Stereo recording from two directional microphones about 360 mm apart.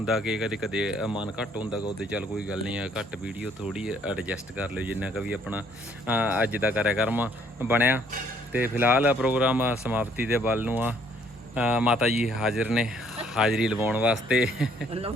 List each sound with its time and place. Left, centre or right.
0.0 s speech: centre
14.8 s speech: centre